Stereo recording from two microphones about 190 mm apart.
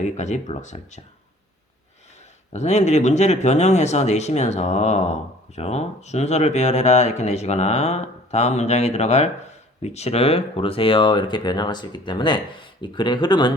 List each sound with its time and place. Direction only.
0.0 s speech: 40° left (ahead or behind)
2.5 s speech: 35° left (ahead or behind)